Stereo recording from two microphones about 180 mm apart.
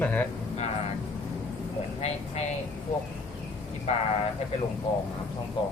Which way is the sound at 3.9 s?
40° left (ahead or behind).